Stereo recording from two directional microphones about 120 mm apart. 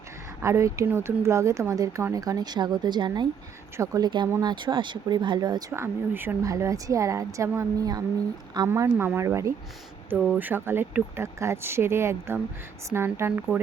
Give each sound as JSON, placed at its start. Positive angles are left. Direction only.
{"t": 0.4, "sound": "speech", "side_deg": -25}
{"t": 5.7, "sound": "speech", "side_deg": -20}